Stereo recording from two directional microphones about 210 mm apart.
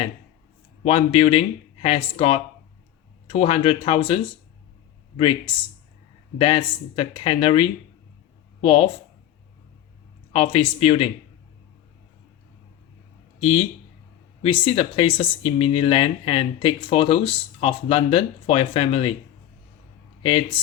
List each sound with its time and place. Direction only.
0.9 s speech: 25° left (ahead or behind)
6.4 s speech: 25° left (ahead or behind)
10.3 s speech: 25° left (ahead or behind)
13.4 s speech: 25° left (ahead or behind)